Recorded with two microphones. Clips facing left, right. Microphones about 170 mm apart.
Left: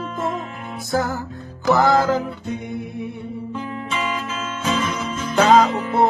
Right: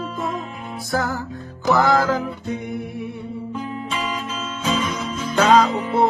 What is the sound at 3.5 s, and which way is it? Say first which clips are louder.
Guitar: left 1 dB; centre (ahead or behind).